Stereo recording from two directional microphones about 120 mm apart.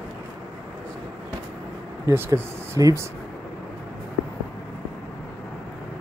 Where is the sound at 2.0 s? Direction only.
20° right (ahead or behind).